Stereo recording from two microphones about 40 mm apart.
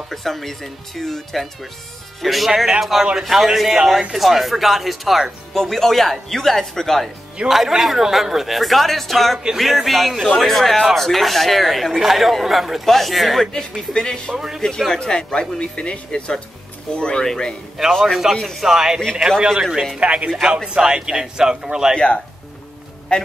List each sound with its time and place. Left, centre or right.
0.1 s a man's voice: centre
5.5 s speech: centre
7.4 s speech: centre
13.5 s speech: centre
14.3 s a man's voice: centre
15.0 s speech: centre
17.9 s speech: centre
18.3 s speech: centre
18.6 s a man's voice: centre
20.0 s speech: right
20.4 s a man's voice: right
21.9 s speech: left